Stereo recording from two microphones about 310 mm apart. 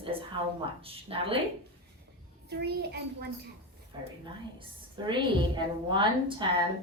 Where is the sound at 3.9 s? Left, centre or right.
Centre.